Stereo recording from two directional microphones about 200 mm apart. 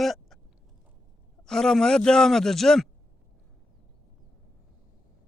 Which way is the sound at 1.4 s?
5° left (ahead or behind).